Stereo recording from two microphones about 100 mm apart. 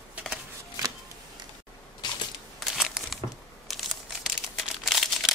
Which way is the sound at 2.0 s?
45° left (ahead or behind).